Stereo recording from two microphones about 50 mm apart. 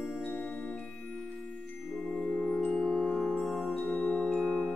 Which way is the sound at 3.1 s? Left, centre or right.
Centre.